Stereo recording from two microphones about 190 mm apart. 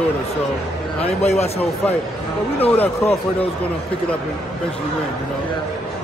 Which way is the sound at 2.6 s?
10° left (ahead or behind).